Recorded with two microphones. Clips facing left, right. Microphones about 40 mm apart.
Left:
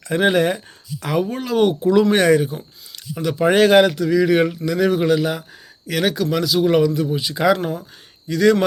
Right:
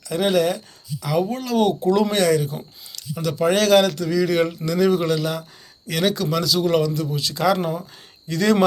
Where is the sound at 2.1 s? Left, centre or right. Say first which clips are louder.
Left 4 dB; left.